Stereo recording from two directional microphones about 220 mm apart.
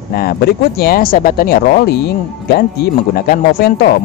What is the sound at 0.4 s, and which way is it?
Speech, 45° left (ahead or behind).